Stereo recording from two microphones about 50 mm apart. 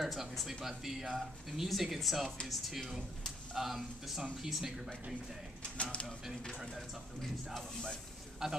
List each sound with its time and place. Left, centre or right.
0.0 s speech: centre
5.6 s speech: left
7.5 s speech: centre
8.4 s speech: centre